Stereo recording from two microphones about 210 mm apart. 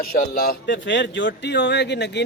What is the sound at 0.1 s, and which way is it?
Speech, 45° left (ahead or behind).